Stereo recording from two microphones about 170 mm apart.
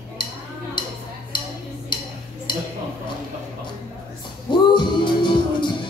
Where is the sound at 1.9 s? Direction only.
25° left (ahead or behind).